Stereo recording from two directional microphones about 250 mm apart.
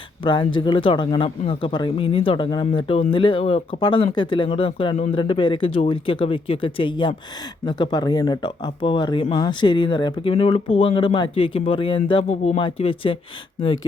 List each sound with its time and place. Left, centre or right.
0.3 s speech: centre